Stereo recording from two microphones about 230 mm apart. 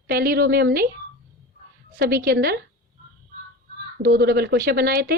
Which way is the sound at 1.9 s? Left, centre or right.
Right.